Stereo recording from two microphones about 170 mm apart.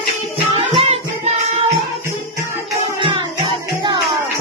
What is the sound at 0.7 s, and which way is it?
Music, 35° right (ahead or behind).